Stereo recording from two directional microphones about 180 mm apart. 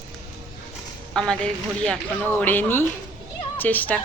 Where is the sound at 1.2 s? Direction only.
5° left (ahead or behind).